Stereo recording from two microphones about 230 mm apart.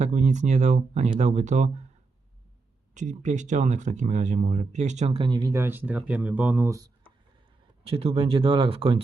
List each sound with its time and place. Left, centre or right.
0.0 s speech: right
2.9 s speech: right